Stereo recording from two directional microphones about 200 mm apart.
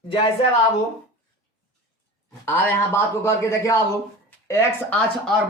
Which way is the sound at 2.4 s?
10° left (ahead or behind).